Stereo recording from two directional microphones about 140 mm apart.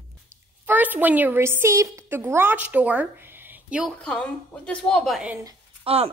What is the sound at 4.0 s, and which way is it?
Speech, 5° left (ahead or behind).